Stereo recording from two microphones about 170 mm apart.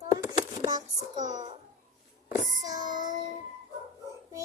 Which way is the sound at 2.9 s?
45° left (ahead or behind).